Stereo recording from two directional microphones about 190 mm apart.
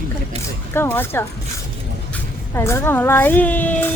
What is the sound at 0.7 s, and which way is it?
Speech, 10° left (ahead or behind).